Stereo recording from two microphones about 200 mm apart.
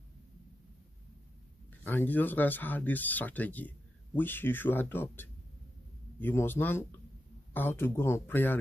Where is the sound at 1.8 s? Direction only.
10° left (ahead or behind).